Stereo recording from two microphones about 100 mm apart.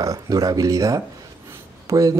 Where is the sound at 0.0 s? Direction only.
35° right (ahead or behind).